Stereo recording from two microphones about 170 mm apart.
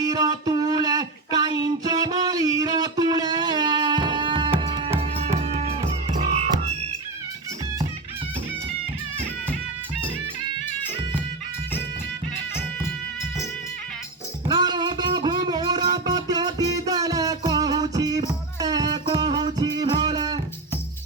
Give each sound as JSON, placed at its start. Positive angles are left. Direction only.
{"t": 0.1, "sound": "a sound", "side_deg": -20}
{"t": 4.6, "sound": "music", "side_deg": -30}
{"t": 14.4, "sound": "music", "side_deg": -25}